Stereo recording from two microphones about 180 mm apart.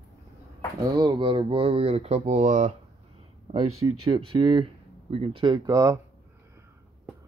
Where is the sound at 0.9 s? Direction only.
25° right (ahead or behind); by 2.7 s 40° right (ahead or behind).